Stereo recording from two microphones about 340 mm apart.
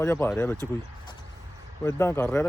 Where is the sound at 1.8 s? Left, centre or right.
Centre.